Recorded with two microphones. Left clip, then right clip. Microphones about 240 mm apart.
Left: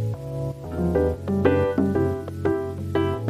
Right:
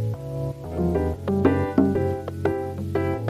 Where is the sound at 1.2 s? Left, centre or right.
Centre.